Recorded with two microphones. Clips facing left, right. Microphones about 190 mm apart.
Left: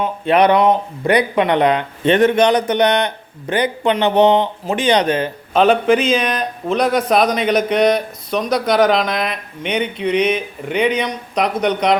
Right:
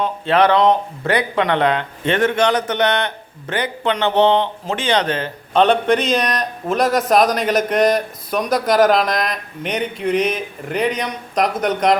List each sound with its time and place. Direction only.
0.0 s speech: 15° left (ahead or behind); by 11.9 s centre (ahead or behind)